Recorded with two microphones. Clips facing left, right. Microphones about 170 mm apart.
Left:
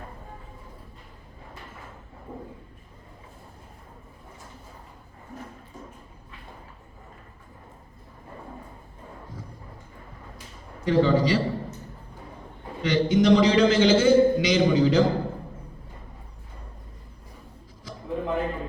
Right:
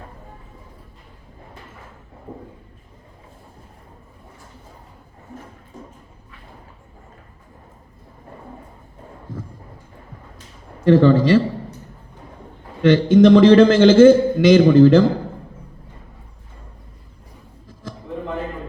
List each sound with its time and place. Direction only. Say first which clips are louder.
10.8 s a man's voice: right 8 dB; 55° right (ahead or behind)
12.8 s a man's voice: right 9 dB; 55° right (ahead or behind)